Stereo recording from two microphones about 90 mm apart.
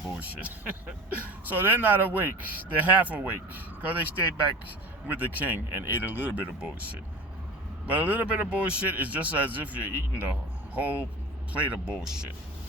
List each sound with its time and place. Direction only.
0.1 s a man's voice: 15° right (ahead or behind)
5.0 s a man's voice: 20° right (ahead or behind)